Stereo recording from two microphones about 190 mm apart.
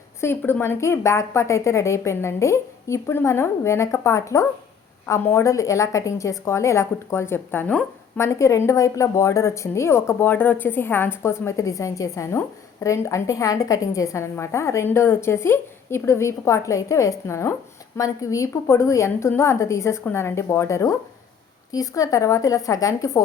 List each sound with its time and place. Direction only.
0.2 s a woman's voice: 10° left (ahead or behind)